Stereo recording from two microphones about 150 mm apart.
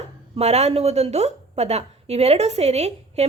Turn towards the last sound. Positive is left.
turn(degrees=-45)  # may be behind; listen again after turning